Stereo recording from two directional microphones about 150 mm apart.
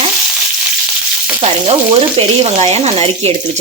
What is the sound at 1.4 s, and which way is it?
Speech, 40° right (ahead or behind).